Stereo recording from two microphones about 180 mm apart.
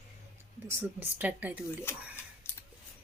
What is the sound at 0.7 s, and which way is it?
Speech, 10° right (ahead or behind).